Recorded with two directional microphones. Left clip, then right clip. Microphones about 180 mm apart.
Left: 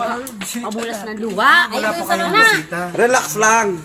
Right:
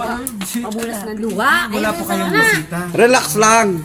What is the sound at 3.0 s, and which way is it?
Speech, 55° right (ahead or behind).